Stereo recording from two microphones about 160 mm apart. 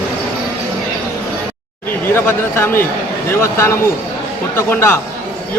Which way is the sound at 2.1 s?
15° left (ahead or behind).